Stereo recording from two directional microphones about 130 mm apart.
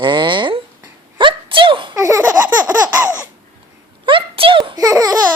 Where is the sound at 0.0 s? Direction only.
35° right (ahead or behind).